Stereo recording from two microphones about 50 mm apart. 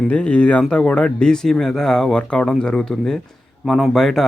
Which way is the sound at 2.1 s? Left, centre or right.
Left.